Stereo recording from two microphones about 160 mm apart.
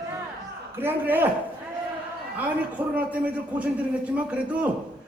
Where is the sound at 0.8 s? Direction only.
10° right (ahead or behind).